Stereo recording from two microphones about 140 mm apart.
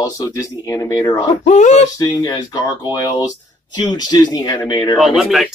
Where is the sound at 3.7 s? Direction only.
30° left (ahead or behind).